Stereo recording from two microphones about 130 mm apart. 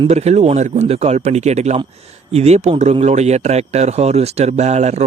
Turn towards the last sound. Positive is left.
turn(degrees=-60)  # may be behind; listen again after turning